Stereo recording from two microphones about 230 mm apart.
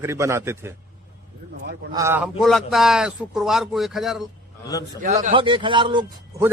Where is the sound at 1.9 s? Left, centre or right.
Centre.